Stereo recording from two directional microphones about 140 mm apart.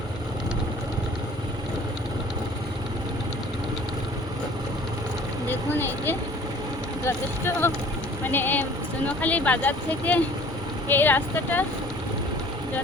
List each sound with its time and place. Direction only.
5.5 s speech: 15° left (ahead or behind)